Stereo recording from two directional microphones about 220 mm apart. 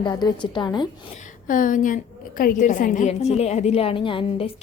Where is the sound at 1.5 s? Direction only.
35° left (ahead or behind).